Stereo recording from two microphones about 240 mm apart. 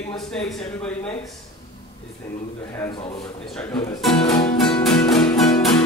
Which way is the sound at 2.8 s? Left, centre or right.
Centre.